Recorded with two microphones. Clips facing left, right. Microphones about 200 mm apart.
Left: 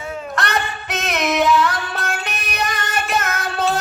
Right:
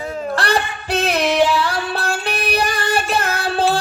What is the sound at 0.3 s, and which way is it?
Female singing, 30° right (ahead or behind).